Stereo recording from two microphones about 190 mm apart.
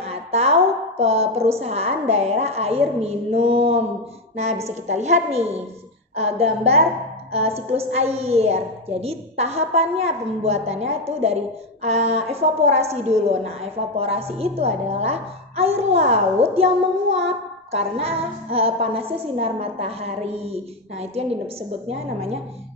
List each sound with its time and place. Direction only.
0.0 s a woman's voice: 35° right (ahead or behind)